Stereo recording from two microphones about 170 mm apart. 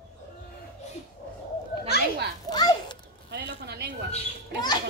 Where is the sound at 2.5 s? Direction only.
25° left (ahead or behind).